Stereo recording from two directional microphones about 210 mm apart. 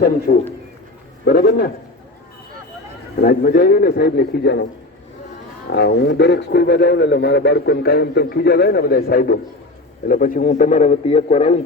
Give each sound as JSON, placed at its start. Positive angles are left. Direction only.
{"t": 0.3, "sound": "a man's voice", "side_deg": 50}
{"t": 3.2, "sound": "a man's voice", "side_deg": 45}
{"t": 5.7, "sound": "a man's voice", "side_deg": 55}